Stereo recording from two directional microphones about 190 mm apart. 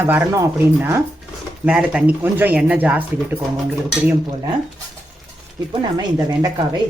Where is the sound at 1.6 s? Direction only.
5° right (ahead or behind).